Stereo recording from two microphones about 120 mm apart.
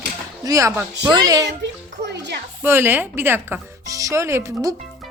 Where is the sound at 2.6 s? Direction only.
20° right (ahead or behind).